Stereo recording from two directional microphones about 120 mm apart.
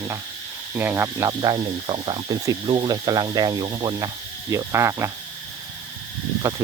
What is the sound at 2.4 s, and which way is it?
Speech, 35° right (ahead or behind).